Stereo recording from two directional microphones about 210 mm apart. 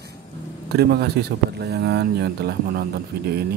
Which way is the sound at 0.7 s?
50° right (ahead or behind).